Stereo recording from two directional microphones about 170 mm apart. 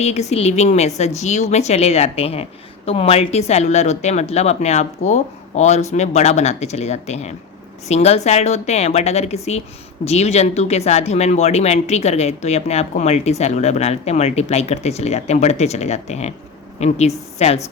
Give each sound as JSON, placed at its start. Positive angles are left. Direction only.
{"t": 0.0, "sound": "a woman's voice", "side_deg": 40}